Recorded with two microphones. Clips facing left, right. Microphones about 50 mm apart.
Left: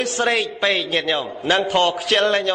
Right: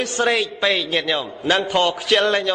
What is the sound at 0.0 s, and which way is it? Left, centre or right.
A man's voice, centre.